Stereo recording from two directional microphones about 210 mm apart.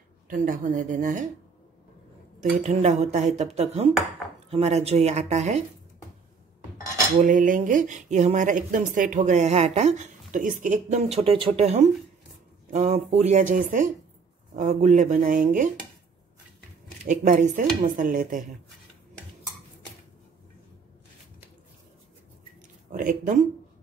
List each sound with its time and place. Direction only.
0.3 s speech: 40° right (ahead or behind)
2.6 s speech: 35° right (ahead or behind)
7.2 s speech: 40° right (ahead or behind)
17.0 s speech: 35° right (ahead or behind)
22.8 s speech: 40° right (ahead or behind)